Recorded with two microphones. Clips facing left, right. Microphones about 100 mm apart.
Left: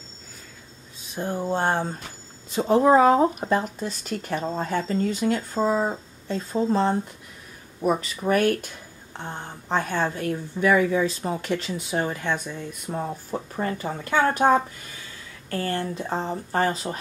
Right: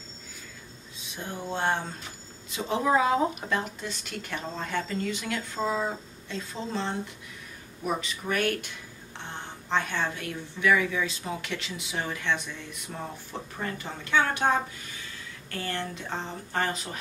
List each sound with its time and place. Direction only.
1.0 s speech: 40° left (ahead or behind)
15.5 s speech: 40° left (ahead or behind)